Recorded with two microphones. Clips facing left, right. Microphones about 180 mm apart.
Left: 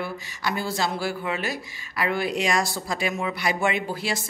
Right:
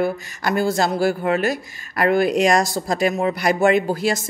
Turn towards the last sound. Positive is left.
turn(degrees=-45)  # may be behind; listen again after turning